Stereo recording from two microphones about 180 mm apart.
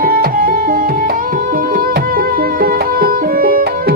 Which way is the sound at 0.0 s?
55° right (ahead or behind).